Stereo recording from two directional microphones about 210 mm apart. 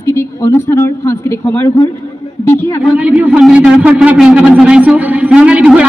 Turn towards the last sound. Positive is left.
turn(degrees=-5)  # may be behind; listen again after turning